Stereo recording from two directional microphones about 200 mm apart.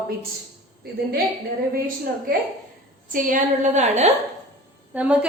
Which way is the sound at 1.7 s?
45° right (ahead or behind).